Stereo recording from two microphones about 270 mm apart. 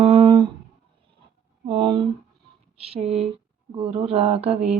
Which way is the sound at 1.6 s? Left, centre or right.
Centre.